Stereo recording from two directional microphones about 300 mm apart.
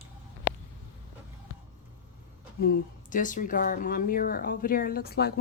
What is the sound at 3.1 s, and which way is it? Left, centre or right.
Speech, left.